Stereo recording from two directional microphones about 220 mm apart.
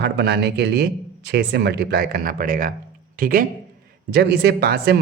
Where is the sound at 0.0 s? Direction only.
50° right (ahead or behind).